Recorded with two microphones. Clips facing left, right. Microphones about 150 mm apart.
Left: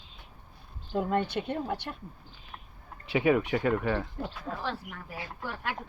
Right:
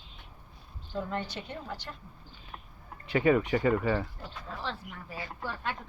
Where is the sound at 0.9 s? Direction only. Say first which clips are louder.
Left 6 dB; 60° left (ahead or behind).